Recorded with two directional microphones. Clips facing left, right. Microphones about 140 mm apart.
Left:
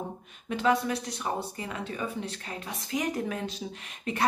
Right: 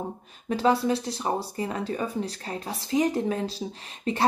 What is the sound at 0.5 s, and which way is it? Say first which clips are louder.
A woman's voice: right 4 dB; 35° right (ahead or behind).